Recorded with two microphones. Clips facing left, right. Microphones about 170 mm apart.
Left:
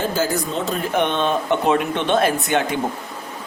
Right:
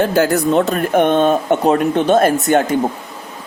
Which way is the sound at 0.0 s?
65° right (ahead or behind).